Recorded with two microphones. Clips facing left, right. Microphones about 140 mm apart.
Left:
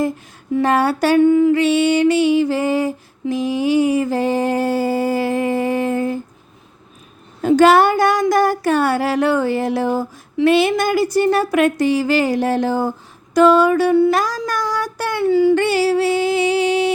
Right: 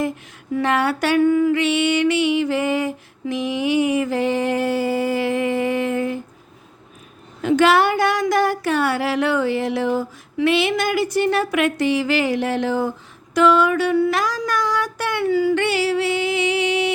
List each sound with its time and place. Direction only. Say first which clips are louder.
0.6 s female singing: left 4 dB; 40° left (ahead or behind)
7.4 s female singing: left 4 dB; 40° left (ahead or behind)
10.4 s speech: left 4 dB; 40° left (ahead or behind)
14.1 s child singing: left 3 dB; 40° left (ahead or behind)
15.5 s music: left 4 dB; 40° left (ahead or behind)